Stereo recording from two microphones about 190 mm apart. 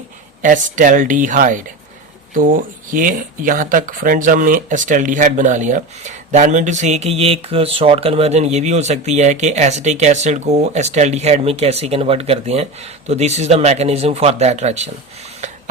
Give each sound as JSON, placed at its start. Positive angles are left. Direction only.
{"t": 0.4, "sound": "speech", "side_deg": -45}